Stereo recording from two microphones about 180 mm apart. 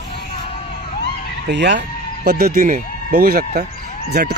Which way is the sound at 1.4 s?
75° right (ahead or behind).